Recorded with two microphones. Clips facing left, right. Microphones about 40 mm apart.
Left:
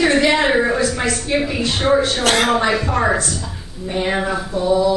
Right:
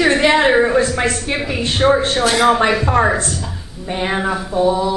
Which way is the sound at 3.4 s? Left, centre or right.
Centre.